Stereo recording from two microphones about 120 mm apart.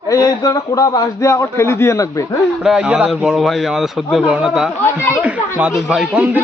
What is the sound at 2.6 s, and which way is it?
A man's voice, 5° right (ahead or behind).